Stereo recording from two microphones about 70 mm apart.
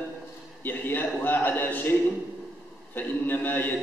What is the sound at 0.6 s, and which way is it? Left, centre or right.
A man's voice, left.